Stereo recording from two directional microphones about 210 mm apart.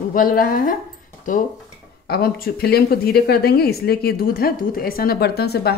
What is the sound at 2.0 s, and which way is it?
Speech, 50° left (ahead or behind).